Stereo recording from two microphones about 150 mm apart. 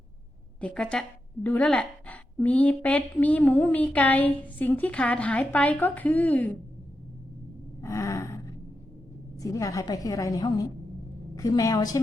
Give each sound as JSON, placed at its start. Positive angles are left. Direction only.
{"t": 0.6, "sound": "a woman's voice", "side_deg": 5}
{"t": 7.8, "sound": "a sound", "side_deg": 20}
{"t": 9.4, "sound": "a woman's voice", "side_deg": 20}